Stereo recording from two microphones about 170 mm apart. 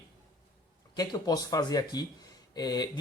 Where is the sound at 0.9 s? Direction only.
20° left (ahead or behind).